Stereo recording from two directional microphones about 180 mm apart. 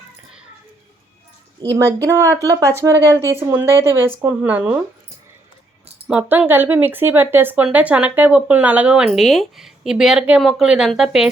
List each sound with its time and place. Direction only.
1.7 s speech: 20° right (ahead or behind)
6.1 s speech: 10° right (ahead or behind)